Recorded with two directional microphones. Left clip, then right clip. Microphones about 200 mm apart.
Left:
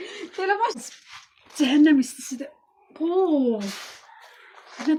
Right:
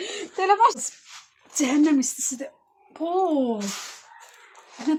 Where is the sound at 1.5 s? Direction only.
30° right (ahead or behind).